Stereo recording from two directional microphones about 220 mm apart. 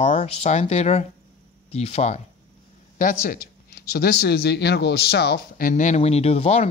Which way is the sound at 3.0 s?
40° left (ahead or behind).